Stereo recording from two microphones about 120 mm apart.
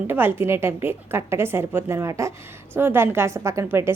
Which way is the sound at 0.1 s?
15° right (ahead or behind).